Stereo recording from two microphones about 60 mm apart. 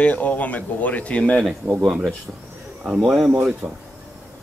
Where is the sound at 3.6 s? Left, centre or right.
Centre.